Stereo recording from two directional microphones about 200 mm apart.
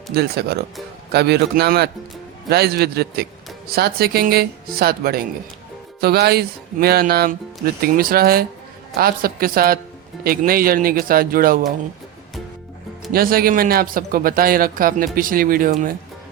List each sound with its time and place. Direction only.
0.1 s a man's voice: 50° right (ahead or behind)
13.1 s a man's voice: 50° right (ahead or behind)